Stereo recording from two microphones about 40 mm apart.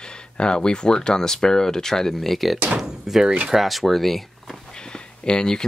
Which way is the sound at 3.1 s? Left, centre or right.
Centre.